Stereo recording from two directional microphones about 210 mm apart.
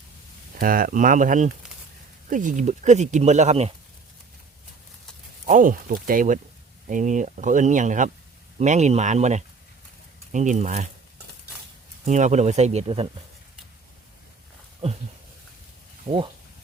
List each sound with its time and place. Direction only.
0.6 s speech: 40° right (ahead or behind)
5.5 s speech: 40° right (ahead or behind)
12.0 s speech: 35° right (ahead or behind)
16.0 s speech: 25° right (ahead or behind)